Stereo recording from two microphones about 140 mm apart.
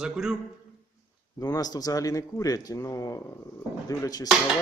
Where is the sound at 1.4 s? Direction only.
25° left (ahead or behind).